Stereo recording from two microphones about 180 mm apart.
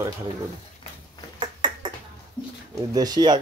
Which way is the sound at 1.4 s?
25° right (ahead or behind).